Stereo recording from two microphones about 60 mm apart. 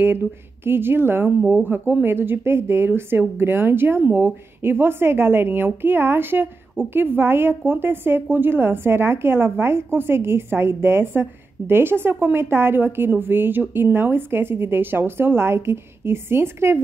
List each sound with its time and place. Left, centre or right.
0.7 s a woman's voice: right